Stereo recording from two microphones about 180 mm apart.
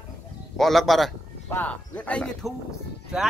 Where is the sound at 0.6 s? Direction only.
Centre (ahead or behind).